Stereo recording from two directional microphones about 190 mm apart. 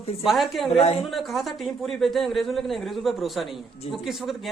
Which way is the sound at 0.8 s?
30° left (ahead or behind).